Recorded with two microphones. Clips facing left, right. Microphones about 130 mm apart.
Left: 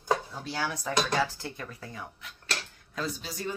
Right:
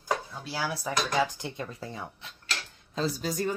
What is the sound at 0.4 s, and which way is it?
Speech, 5° right (ahead or behind).